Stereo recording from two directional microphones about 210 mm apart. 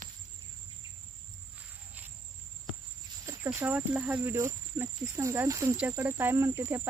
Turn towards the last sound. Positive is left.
turn(degrees=-10)  # may be behind; listen again after turning